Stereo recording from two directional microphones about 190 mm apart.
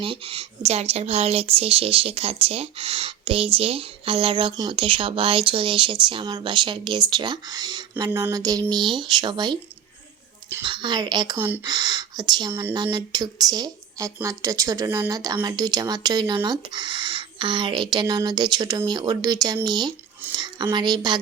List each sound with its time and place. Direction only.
0.0 s speech: 30° right (ahead or behind)
10.6 s speech: 25° right (ahead or behind)
11.3 s speech: 10° right (ahead or behind)
11.6 s speech: 20° right (ahead or behind)